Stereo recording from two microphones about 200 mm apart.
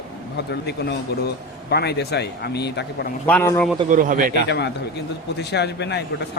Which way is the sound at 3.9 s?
40° right (ahead or behind).